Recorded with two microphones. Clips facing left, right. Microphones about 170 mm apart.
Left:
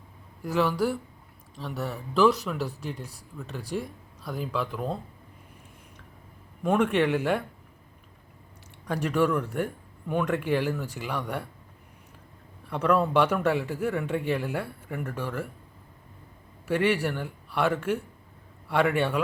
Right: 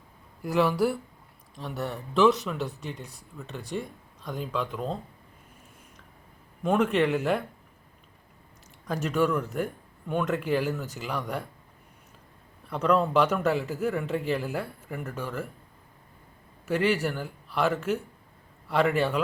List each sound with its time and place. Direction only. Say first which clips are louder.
0.4 s a man's voice: right 1 dB; centre (ahead or behind)
6.6 s a man's voice: even; centre (ahead or behind)
9.0 s speech: left 1 dB; 10° left (ahead or behind)
9.3 s a man's voice: left 1 dB; 5° right (ahead or behind)
12.7 s a man's voice: even; 5° left (ahead or behind)
16.7 s a man's voice: left 1 dB; centre (ahead or behind)